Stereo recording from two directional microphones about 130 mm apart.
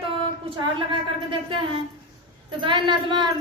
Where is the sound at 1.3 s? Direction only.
45° right (ahead or behind).